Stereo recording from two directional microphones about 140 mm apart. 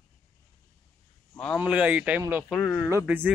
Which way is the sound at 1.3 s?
10° left (ahead or behind).